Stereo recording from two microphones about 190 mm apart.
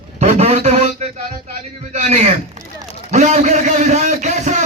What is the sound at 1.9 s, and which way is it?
Speech, 35° right (ahead or behind).